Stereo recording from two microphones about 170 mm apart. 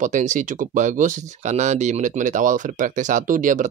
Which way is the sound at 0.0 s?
45° right (ahead or behind).